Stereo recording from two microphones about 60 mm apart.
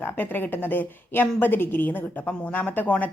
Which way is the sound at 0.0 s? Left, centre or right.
Left.